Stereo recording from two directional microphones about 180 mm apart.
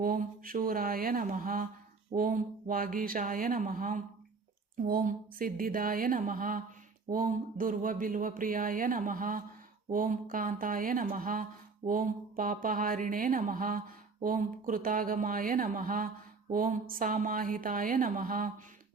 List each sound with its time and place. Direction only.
0.0 s speech: 50° right (ahead or behind)